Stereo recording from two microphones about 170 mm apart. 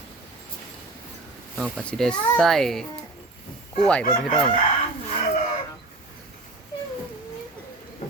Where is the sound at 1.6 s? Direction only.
5° left (ahead or behind).